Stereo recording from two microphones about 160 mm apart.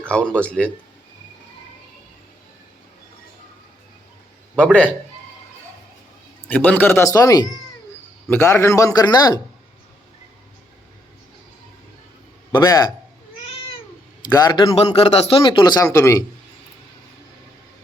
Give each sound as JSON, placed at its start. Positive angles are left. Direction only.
{"t": 0.1, "sound": "speech", "side_deg": 5}
{"t": 4.5, "sound": "speech", "side_deg": 10}
{"t": 6.5, "sound": "speech", "side_deg": 10}
{"t": 12.5, "sound": "a man's voice", "side_deg": 20}
{"t": 14.3, "sound": "speech", "side_deg": 25}